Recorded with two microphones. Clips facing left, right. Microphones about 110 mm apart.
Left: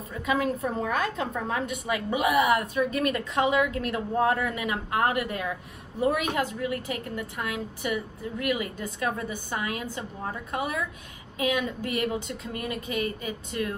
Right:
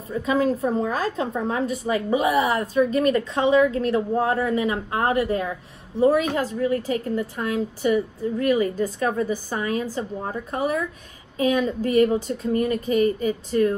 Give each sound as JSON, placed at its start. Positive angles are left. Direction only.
{"t": 0.2, "sound": "a woman's voice", "side_deg": -30}